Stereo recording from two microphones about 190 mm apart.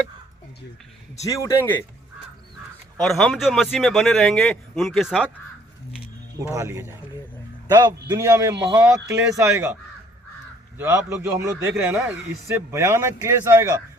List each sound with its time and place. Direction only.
1.2 s speech: 15° left (ahead or behind)
3.0 s speech: centre (ahead or behind)
6.4 s a man's voice: 15° right (ahead or behind)
8.6 s a man's voice: 5° right (ahead or behind)
10.8 s a man's voice: 15° right (ahead or behind)